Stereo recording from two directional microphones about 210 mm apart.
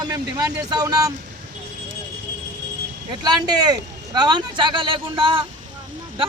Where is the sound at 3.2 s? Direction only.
20° right (ahead or behind).